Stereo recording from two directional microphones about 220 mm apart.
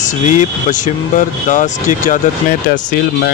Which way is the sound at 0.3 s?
35° left (ahead or behind).